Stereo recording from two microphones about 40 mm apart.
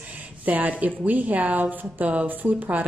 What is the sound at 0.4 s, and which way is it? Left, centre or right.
A woman's voice, right.